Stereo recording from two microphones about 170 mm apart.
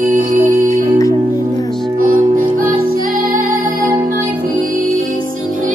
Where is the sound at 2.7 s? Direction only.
55° right (ahead or behind).